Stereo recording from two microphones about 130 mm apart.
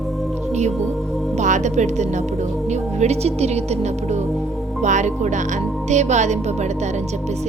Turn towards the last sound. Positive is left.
turn(degrees=-60)  # may be behind; listen again after turning